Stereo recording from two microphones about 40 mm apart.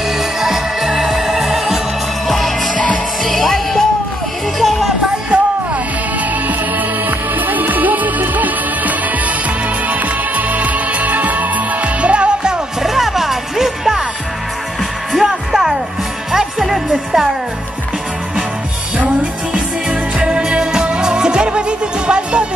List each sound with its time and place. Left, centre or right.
0.2 s music: centre
2.2 s music: centre
5.3 s music: right
7.1 s music: right
12.8 s music: centre
15.1 s music: centre
19.5 s music: right